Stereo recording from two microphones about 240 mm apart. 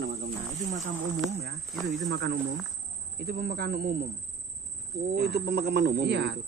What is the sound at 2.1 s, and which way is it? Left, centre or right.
Speech, right.